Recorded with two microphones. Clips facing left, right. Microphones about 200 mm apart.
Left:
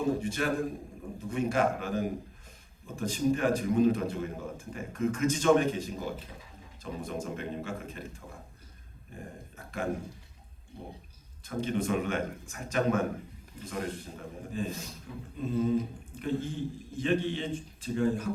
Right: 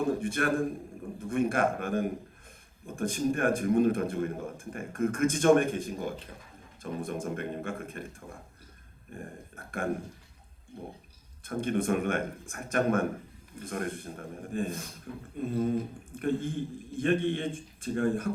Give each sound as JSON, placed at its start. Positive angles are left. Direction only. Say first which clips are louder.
{"t": 0.2, "sound": "a man's voice", "louder": "right 2 dB", "side_deg": -55}
{"t": 11.4, "sound": "a man's voice", "louder": "right 2 dB", "side_deg": -55}